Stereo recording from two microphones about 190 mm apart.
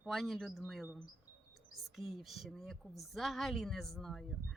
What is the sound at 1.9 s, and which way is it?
Speech, centre (ahead or behind).